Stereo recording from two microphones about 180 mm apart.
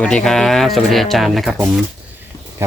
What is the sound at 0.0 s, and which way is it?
Speech, 5° left (ahead or behind).